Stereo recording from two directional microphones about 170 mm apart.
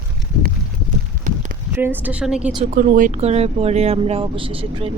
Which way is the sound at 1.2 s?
50° right (ahead or behind).